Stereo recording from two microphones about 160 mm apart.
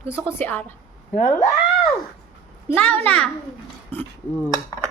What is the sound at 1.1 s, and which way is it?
Speech, 50° left (ahead or behind).